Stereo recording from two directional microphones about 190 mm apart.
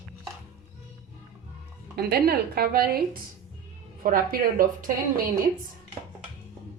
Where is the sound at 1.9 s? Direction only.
55° right (ahead or behind).